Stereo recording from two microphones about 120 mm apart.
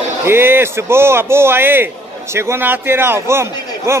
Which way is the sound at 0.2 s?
20° right (ahead or behind).